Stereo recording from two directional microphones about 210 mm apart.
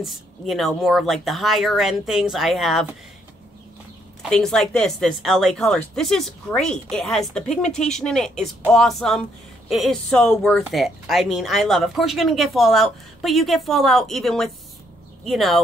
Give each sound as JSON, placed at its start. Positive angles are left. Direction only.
{"t": 0.0, "sound": "speech", "side_deg": 0}
{"t": 4.2, "sound": "speech", "side_deg": 0}